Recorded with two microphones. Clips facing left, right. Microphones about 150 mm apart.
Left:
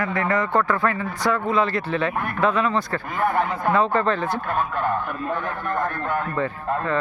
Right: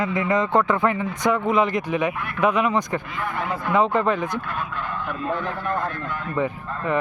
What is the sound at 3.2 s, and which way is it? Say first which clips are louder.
Speech: left 5 dB; 50° left (ahead or behind).